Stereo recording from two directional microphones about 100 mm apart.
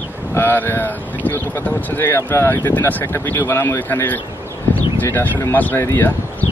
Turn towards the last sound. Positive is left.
turn(degrees=20)  # may be behind; listen again after turning